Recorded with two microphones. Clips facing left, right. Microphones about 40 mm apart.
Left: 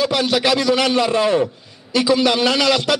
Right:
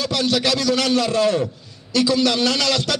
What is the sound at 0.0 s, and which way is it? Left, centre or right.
A man's voice, centre.